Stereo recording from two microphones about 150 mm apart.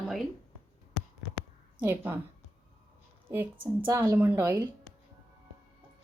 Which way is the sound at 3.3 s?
15° right (ahead or behind).